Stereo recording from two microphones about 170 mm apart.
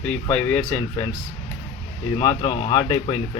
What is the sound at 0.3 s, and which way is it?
Speech, 10° left (ahead or behind).